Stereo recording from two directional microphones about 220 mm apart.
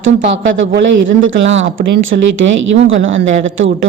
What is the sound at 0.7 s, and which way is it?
A woman's voice, 60° right (ahead or behind).